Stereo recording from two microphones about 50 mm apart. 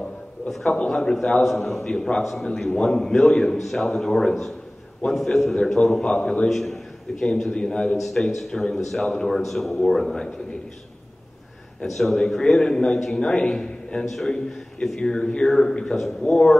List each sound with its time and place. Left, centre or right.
0.7 s a man's voice: centre
6.5 s a sound: centre
7.2 s a man's voice: centre
7.5 s a man's voice: centre
8.0 s a man's voice: centre
11.8 s a man's voice: centre